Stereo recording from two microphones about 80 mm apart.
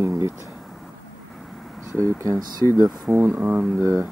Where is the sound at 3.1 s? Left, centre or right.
Right.